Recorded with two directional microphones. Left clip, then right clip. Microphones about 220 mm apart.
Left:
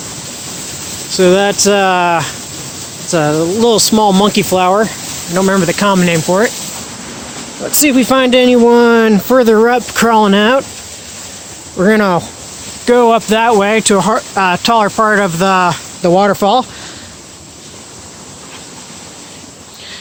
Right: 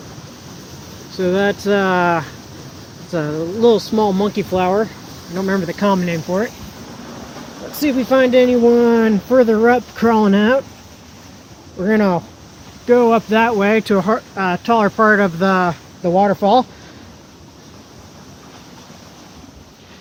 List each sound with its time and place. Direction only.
1.3 s speech: 35° left (ahead or behind)
3.6 s speech: 50° left (ahead or behind)
7.8 s speech: 40° left (ahead or behind)
11.8 s speech: 40° left (ahead or behind); by 14.3 s 25° left (ahead or behind)
14.3 s speech: 40° left (ahead or behind)